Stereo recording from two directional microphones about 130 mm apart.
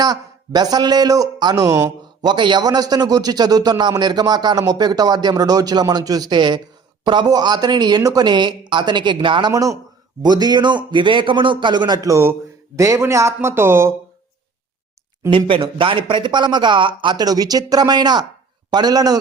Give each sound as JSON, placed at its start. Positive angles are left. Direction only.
{"t": 0.0, "sound": "speech", "side_deg": -30}
{"t": 2.3, "sound": "a man's voice", "side_deg": -35}
{"t": 9.5, "sound": "a man's voice", "side_deg": -25}
{"t": 15.3, "sound": "a man's voice", "side_deg": -40}